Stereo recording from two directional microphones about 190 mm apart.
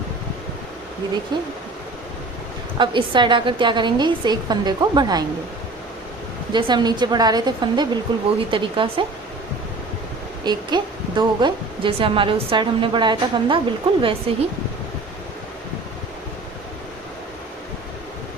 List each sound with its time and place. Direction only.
1.3 s a woman's voice: 20° right (ahead or behind)
2.7 s a woman's voice: 25° right (ahead or behind)
6.5 s a woman's voice: 25° right (ahead or behind)
10.4 s a woman's voice: 25° right (ahead or behind)